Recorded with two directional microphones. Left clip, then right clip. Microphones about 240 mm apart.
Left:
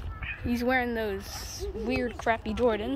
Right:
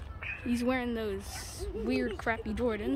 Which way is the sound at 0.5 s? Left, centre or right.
Centre.